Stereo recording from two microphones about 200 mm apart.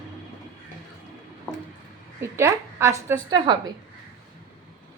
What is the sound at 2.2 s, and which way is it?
A woman's voice, 15° right (ahead or behind).